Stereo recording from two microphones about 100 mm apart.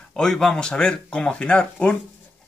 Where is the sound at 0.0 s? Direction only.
5° left (ahead or behind).